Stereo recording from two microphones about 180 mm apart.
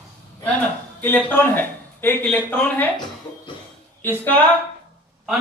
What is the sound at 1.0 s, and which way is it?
A man's voice, 10° left (ahead or behind).